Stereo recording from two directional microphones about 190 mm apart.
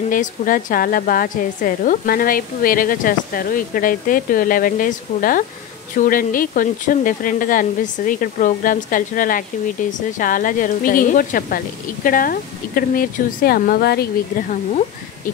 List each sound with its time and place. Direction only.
0.1 s a woman's voice: 45° left (ahead or behind)